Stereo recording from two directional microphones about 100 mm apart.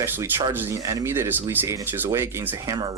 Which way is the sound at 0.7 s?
35° right (ahead or behind).